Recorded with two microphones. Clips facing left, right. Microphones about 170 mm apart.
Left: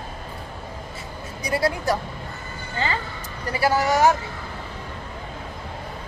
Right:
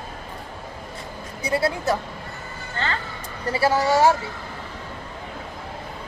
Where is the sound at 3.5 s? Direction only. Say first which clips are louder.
Right 1 dB; 30° right (ahead or behind).